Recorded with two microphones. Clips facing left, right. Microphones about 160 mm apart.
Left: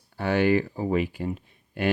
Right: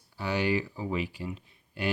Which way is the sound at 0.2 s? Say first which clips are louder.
Left 7 dB; 55° left (ahead or behind).